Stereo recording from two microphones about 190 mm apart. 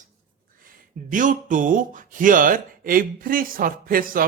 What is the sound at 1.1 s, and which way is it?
Speech, 45° right (ahead or behind).